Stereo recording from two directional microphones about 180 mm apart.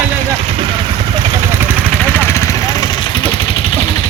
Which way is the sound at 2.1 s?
15° left (ahead or behind).